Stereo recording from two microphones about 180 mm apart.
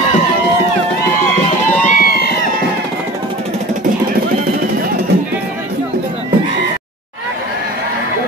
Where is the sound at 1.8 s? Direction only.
55° left (ahead or behind).